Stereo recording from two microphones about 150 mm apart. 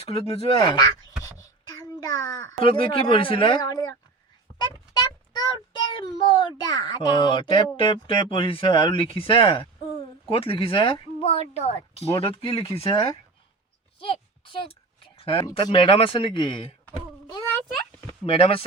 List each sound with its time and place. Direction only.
0.0 s a child's voice: 40° left (ahead or behind)
2.0 s a child's voice: 25° left (ahead or behind)
2.6 s a child's voice: 35° left (ahead or behind)
14.0 s a sound: 35° left (ahead or behind)
15.5 s a child's voice: 35° left (ahead or behind)
18.3 s a child's voice: 40° left (ahead or behind)